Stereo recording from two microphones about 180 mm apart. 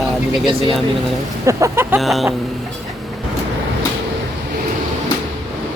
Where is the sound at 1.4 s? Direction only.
15° right (ahead or behind).